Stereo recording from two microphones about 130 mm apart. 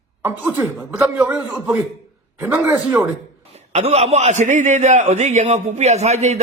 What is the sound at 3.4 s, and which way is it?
A man's voice, 55° right (ahead or behind).